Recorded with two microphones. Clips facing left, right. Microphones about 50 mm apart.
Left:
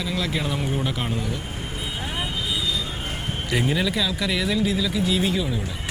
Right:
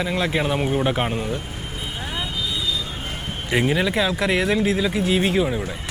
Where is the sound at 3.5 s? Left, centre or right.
Right.